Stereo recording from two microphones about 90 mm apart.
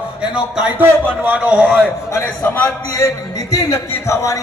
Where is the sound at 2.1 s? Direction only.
30° left (ahead or behind).